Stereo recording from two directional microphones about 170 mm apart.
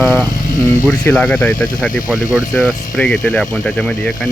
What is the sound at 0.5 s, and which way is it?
Speech, 20° left (ahead or behind).